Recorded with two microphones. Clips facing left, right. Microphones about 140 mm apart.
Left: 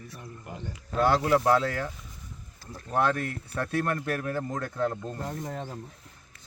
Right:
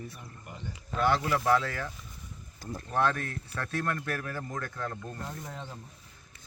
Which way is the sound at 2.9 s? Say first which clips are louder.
Left 3 dB; 15° left (ahead or behind).